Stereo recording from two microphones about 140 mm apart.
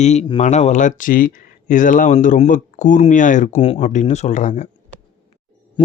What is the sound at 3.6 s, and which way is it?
Speech, 40° left (ahead or behind).